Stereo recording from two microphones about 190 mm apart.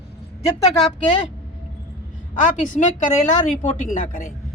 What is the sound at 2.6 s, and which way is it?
Speech, 40° left (ahead or behind).